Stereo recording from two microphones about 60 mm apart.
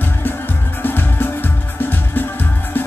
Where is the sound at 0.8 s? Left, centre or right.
Left.